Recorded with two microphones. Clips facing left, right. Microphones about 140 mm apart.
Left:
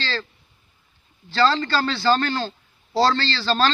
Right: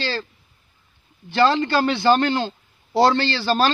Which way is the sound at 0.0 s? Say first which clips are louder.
Right 3 dB; 10° right (ahead or behind).